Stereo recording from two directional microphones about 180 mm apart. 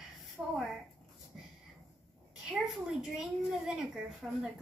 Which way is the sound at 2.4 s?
Centre (ahead or behind).